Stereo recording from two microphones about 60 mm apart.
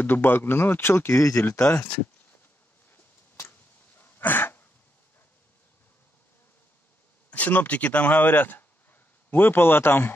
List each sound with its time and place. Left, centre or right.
0.0 s speech: left
2.9 s a sound: left
7.2 s speech: left